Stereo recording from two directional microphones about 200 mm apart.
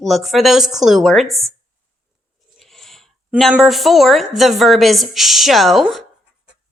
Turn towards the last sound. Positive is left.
turn(degrees=0)  # may be behind; listen again after turning